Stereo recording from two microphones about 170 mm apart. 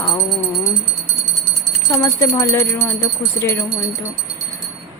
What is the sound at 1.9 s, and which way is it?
Speech, 20° left (ahead or behind).